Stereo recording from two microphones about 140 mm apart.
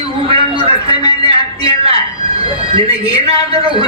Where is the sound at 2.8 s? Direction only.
45° right (ahead or behind).